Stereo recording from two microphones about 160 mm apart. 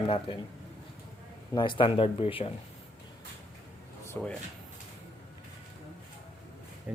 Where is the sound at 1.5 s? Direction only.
30° left (ahead or behind).